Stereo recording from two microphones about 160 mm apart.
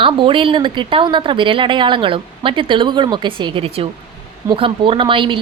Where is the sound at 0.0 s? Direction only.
30° right (ahead or behind).